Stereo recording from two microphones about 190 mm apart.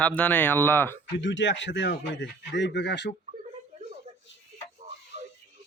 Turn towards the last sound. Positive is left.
turn(degrees=-40)  # may be behind; listen again after turning